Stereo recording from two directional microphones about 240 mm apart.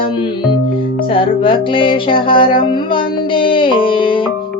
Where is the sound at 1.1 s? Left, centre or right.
Left.